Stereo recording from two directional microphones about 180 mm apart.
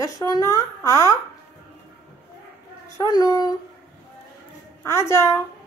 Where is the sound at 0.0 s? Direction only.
20° left (ahead or behind).